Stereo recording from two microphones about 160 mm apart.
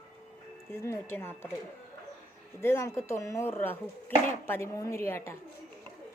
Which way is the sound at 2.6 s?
15° left (ahead or behind).